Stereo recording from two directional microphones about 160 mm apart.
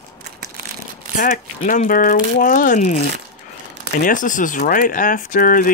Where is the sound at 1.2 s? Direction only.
55° left (ahead or behind).